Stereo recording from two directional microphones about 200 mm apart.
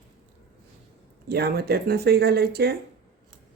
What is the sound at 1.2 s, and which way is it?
Speech, 50° right (ahead or behind).